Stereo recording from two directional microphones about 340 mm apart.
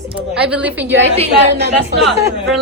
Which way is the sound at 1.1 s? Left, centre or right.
Centre.